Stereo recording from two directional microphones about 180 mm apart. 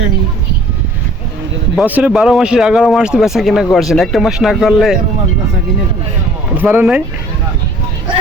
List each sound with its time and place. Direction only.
1.7 s speech: 5° right (ahead or behind)
6.6 s speech: 10° right (ahead or behind)